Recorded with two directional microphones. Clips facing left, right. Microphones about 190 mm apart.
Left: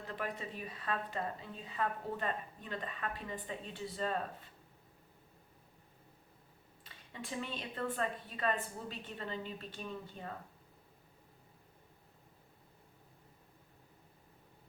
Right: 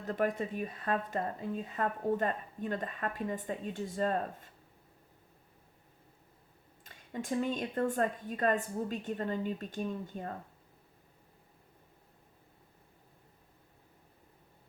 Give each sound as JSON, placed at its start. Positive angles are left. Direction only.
{"t": 0.0, "sound": "speech", "side_deg": -45}
{"t": 6.8, "sound": "speech", "side_deg": -45}